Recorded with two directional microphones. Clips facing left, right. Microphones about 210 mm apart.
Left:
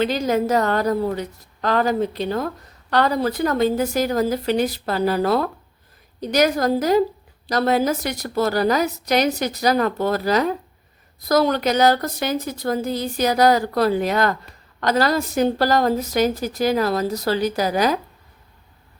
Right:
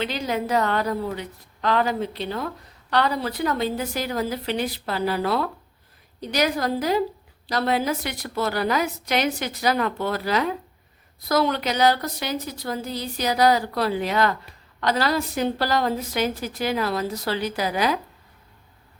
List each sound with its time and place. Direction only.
0.0 s a woman's voice: 45° left (ahead or behind)